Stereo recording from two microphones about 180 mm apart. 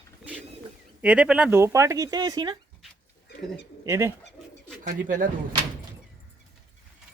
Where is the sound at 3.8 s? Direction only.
15° right (ahead or behind).